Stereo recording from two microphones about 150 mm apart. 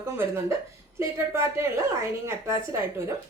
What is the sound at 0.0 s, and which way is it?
A woman's voice, 15° right (ahead or behind).